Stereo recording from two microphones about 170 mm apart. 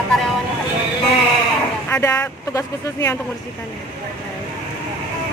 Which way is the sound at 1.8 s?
15° left (ahead or behind).